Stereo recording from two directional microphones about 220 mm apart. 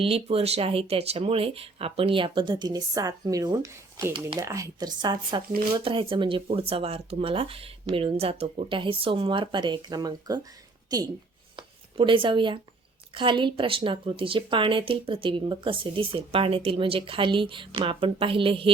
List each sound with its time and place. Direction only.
0.0 s a woman's voice: 25° right (ahead or behind)
11.5 s a sound: 25° right (ahead or behind)
13.1 s a woman's voice: 20° right (ahead or behind)